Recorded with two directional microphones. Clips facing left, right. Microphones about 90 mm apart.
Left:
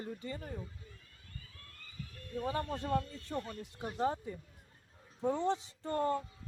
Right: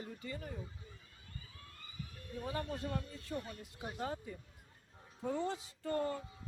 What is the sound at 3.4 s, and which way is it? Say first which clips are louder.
Speech: left 5 dB; 10° right (ahead or behind).